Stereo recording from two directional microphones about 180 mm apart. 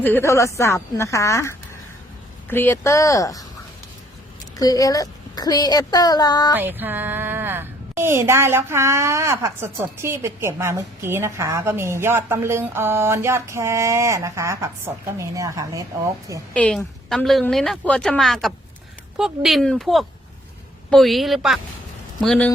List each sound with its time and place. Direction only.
0.0 s a woman's voice: 10° left (ahead or behind)
4.5 s a woman's voice: 20° left (ahead or behind)
6.6 s a woman's voice: 10° right (ahead or behind)
16.6 s a woman's voice: 5° left (ahead or behind)